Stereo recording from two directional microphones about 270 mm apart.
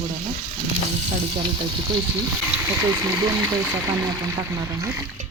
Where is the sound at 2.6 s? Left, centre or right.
Centre.